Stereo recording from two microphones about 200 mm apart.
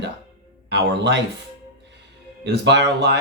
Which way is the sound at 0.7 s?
60° right (ahead or behind).